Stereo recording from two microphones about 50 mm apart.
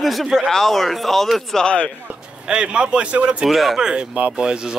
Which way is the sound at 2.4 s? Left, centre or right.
Centre.